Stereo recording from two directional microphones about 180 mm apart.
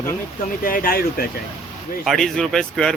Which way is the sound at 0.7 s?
50° left (ahead or behind).